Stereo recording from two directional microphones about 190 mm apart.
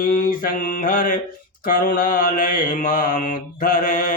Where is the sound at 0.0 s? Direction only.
50° left (ahead or behind).